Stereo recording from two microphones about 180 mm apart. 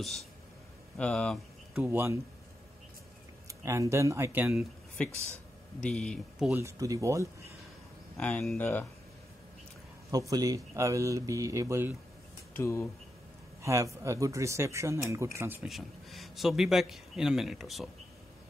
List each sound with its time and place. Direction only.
0.9 s a man's voice: 5° left (ahead or behind)
1.8 s speech: 15° right (ahead or behind)
3.4 s speech: 15° right (ahead or behind)
4.6 s a man's voice: 5° left (ahead or behind)
6.5 s speech: 15° right (ahead or behind)
8.2 s speech: 5° left (ahead or behind)
10.1 s speech: 20° right (ahead or behind)
12.5 s speech: 15° left (ahead or behind)
13.6 s speech: 15° right (ahead or behind)
15.7 s a man's voice: centre (ahead or behind)